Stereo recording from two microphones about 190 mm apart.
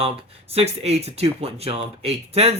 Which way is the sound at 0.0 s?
30° right (ahead or behind).